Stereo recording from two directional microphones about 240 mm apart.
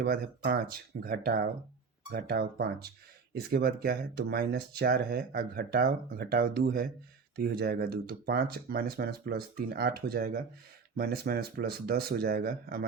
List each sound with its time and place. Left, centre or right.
0.0 s speech: right